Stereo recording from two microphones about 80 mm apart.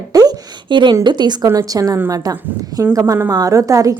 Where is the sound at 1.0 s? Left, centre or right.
Right.